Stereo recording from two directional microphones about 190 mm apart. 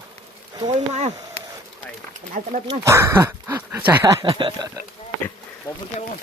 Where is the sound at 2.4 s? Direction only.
45° right (ahead or behind).